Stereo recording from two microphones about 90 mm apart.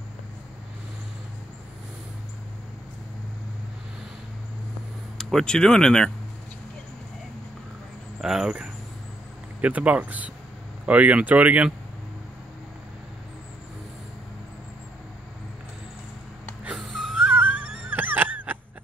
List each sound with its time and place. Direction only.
5.1 s speech: centre (ahead or behind)
8.2 s speech: 5° right (ahead or behind)
16.7 s wheeze: centre (ahead or behind)
17.2 s wail: 15° right (ahead or behind)